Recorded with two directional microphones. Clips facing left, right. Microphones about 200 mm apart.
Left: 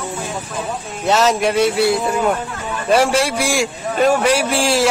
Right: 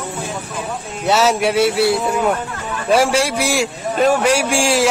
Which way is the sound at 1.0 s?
10° right (ahead or behind).